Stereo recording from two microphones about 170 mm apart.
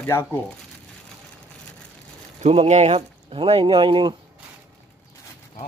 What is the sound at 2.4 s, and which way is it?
Speech, 40° right (ahead or behind).